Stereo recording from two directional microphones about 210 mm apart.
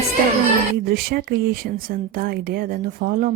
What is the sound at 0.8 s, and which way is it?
Speech, 45° right (ahead or behind).